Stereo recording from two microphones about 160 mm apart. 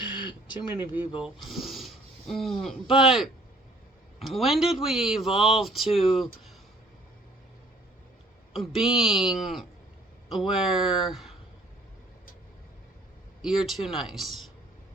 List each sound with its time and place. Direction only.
0.0 s a sound: 30° left (ahead or behind)
0.8 s speech: 10° right (ahead or behind)
8.5 s speech: centre (ahead or behind)
13.4 s speech: 5° right (ahead or behind)